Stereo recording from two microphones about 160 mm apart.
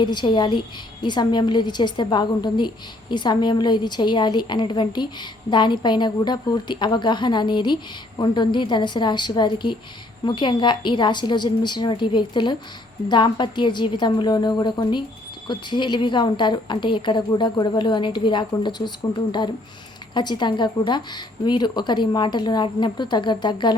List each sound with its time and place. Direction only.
0.0 s a woman's voice: 30° left (ahead or behind)
20.1 s a woman's voice: 30° left (ahead or behind)